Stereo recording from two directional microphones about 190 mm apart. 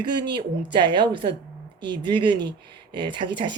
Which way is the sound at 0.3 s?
25° right (ahead or behind).